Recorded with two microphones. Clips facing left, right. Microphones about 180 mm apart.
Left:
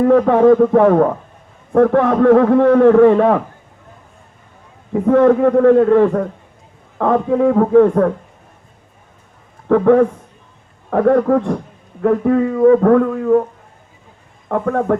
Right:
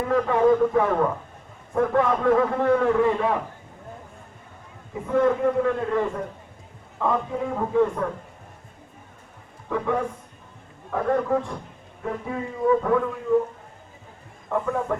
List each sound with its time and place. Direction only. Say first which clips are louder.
0.1 s a man's voice: left 7 dB; 65° left (ahead or behind)
4.9 s a man's voice: left 10 dB; 65° left (ahead or behind)
9.6 s a man's voice: left 14 dB; 60° left (ahead or behind)
14.5 s a man's voice: left 8 dB; 70° left (ahead or behind)